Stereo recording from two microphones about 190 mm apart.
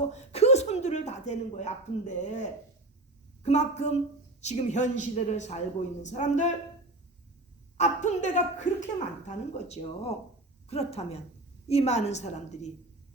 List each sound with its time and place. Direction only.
0.1 s a sound: 35° left (ahead or behind)
3.4 s a woman's voice: 35° left (ahead or behind)
7.8 s a woman's voice: 40° left (ahead or behind)